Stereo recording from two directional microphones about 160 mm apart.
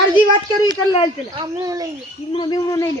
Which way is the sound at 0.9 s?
35° left (ahead or behind).